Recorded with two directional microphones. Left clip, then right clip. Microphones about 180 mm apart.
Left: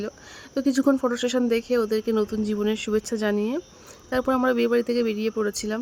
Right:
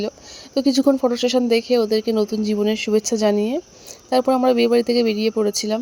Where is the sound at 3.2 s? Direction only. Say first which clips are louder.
Right 6 dB; 10° right (ahead or behind).